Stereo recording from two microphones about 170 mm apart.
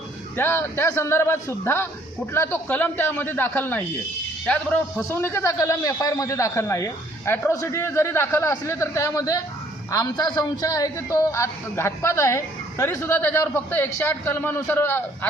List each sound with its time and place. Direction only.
0.3 s a man's voice: 15° left (ahead or behind)